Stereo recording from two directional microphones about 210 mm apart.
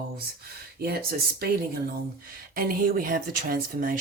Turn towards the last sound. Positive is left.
turn(degrees=-40)  # may be behind; listen again after turning